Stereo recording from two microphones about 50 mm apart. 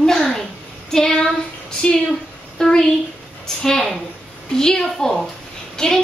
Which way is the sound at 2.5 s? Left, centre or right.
Centre.